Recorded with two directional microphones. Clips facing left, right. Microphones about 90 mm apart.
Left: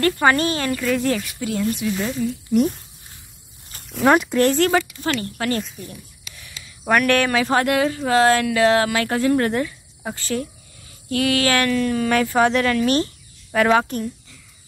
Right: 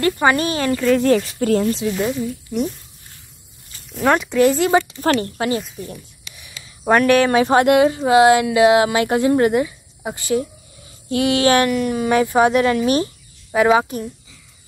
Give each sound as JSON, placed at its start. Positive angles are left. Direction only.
{"t": 0.0, "sound": "speech", "side_deg": -15}
{"t": 1.4, "sound": "a woman's voice", "side_deg": -45}
{"t": 1.7, "sound": "speech", "side_deg": -25}
{"t": 2.0, "sound": "speech", "side_deg": -5}
{"t": 4.0, "sound": "speech", "side_deg": 5}
{"t": 5.0, "sound": "speech", "side_deg": -40}
{"t": 5.8, "sound": "a sound", "side_deg": -20}
{"t": 6.9, "sound": "speech", "side_deg": -25}